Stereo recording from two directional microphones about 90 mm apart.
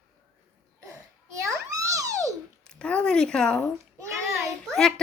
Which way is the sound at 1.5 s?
35° right (ahead or behind).